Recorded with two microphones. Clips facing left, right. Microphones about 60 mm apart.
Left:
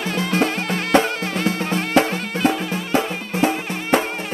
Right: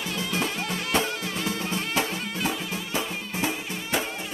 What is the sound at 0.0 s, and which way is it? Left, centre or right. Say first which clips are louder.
Music: left 8 dB; left.